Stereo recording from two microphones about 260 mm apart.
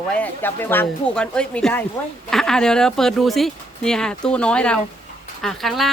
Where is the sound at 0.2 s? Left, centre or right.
Centre.